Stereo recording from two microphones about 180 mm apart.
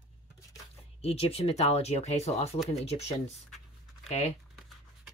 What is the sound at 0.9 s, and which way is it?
Speech, 35° left (ahead or behind).